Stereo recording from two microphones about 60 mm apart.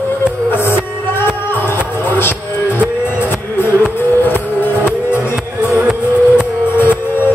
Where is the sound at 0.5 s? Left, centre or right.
Left.